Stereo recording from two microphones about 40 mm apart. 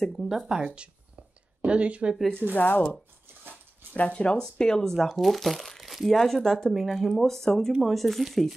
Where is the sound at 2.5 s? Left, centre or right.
Left.